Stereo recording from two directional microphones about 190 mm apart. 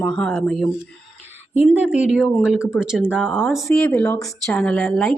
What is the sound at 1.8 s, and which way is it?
Speech, 5° right (ahead or behind).